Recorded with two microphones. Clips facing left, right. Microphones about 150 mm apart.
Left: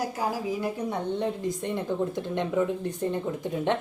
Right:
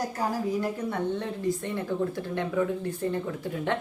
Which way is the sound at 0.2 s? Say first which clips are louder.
Right 3 dB; 10° left (ahead or behind).